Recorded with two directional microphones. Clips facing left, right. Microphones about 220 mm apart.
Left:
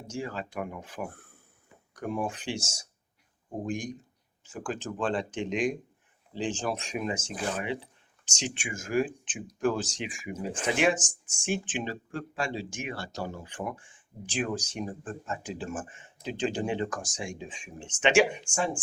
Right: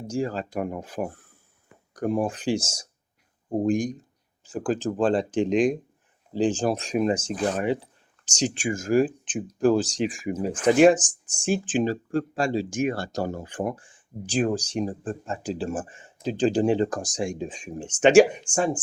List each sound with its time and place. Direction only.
0.1 s speech: 40° right (ahead or behind)